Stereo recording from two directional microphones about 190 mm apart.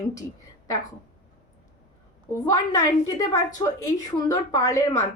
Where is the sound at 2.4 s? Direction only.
20° left (ahead or behind).